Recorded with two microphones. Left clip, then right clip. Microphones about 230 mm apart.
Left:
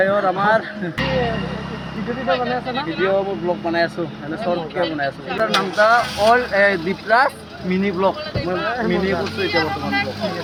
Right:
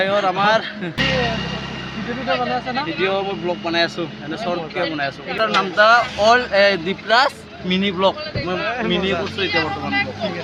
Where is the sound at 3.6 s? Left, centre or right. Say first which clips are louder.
Right 2 dB; centre.